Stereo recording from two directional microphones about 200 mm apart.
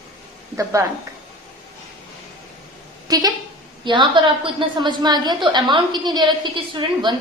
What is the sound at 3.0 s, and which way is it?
A woman's voice, 20° right (ahead or behind).